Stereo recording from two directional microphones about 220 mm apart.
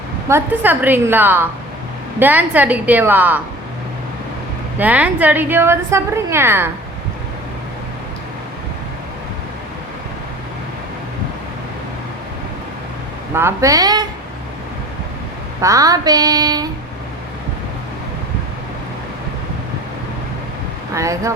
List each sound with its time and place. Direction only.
0.3 s a woman's voice: 10° right (ahead or behind)
4.8 s a woman's voice: 5° right (ahead or behind)
13.3 s a woman's voice: 10° right (ahead or behind)
15.6 s a woman's voice: 15° right (ahead or behind)
20.9 s a woman's voice: 15° right (ahead or behind)